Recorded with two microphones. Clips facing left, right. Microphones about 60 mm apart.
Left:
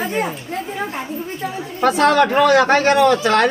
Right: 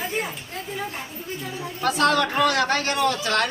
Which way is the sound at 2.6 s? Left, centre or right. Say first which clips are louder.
Left 9 dB; left.